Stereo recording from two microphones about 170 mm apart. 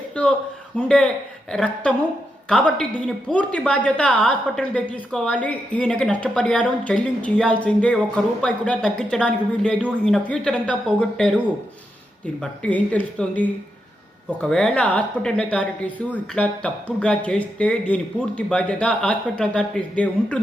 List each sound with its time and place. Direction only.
0.2 s a man's voice: 5° left (ahead or behind)
12.2 s a woman's voice: 10° left (ahead or behind)